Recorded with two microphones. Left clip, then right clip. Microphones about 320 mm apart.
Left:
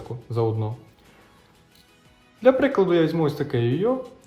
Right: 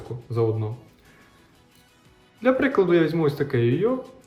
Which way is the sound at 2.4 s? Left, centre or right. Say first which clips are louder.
Left 2 dB; centre.